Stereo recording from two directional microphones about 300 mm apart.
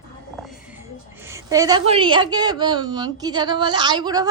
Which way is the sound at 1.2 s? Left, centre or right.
Centre.